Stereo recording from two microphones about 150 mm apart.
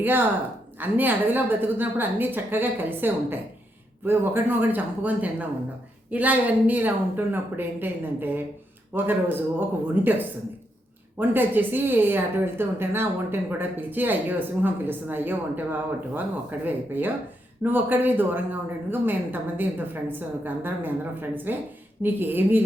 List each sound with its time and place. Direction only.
0.0 s speech: 15° right (ahead or behind)